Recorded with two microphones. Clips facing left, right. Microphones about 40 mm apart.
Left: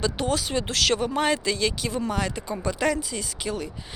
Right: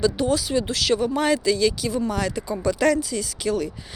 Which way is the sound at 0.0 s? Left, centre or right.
Left.